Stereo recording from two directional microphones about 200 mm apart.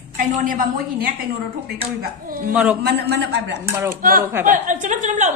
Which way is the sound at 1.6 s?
50° right (ahead or behind).